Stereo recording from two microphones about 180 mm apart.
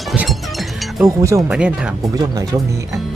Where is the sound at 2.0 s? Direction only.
20° right (ahead or behind).